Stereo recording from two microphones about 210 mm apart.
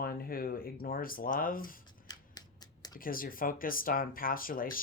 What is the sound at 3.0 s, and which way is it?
Speech, 40° left (ahead or behind).